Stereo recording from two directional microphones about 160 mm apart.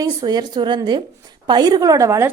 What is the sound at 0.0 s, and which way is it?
A woman's voice, 25° right (ahead or behind).